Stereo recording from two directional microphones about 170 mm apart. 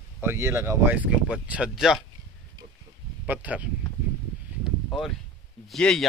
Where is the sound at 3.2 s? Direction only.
10° right (ahead or behind).